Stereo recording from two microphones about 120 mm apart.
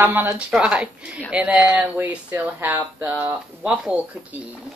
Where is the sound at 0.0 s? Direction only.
20° right (ahead or behind).